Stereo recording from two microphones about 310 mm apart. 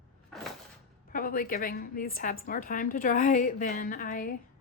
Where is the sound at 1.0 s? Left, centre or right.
Left.